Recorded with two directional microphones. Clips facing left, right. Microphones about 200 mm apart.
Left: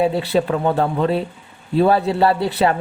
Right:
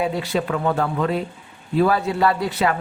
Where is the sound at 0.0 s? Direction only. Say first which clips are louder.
Left 5 dB; 30° left (ahead or behind).